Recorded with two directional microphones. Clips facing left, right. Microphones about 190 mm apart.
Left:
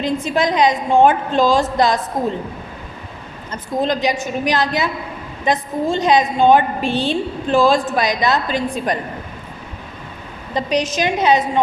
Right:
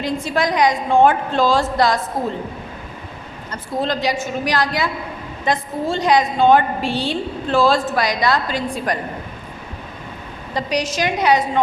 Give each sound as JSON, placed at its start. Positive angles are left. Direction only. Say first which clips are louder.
{"t": 0.0, "sound": "a woman's voice", "louder": "left 2 dB", "side_deg": 20}
{"t": 3.5, "sound": "a woman's voice", "louder": "left 3 dB", "side_deg": 20}
{"t": 10.5, "sound": "a woman's voice", "louder": "left 3 dB", "side_deg": 20}